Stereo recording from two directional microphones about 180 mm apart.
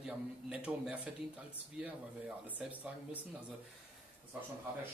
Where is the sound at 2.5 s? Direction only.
10° right (ahead or behind).